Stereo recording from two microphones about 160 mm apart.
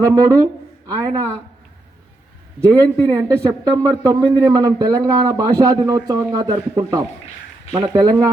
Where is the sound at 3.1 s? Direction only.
20° right (ahead or behind).